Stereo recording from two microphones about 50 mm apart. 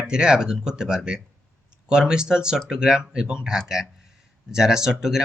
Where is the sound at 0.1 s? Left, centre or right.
Centre.